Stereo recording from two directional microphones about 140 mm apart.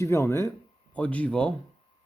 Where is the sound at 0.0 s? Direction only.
20° left (ahead or behind).